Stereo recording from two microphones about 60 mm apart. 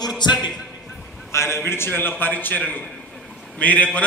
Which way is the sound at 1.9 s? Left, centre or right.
Left.